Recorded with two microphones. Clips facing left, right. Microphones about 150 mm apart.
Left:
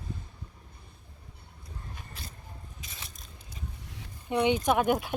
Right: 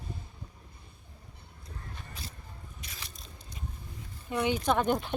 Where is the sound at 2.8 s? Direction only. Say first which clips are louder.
Even; centre (ahead or behind).